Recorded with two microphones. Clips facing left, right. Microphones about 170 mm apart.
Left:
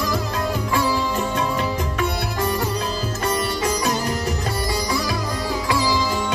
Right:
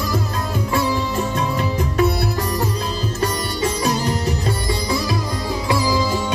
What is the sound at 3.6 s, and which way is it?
Music, 25° right (ahead or behind).